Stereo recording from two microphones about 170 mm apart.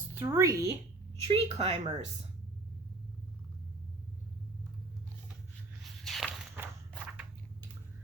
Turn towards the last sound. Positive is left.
turn(degrees=0)  # may be behind; listen again after turning